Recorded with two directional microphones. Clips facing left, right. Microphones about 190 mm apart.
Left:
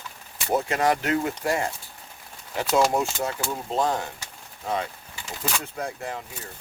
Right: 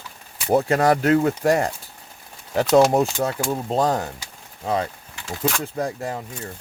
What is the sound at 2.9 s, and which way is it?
Speech, 35° right (ahead or behind).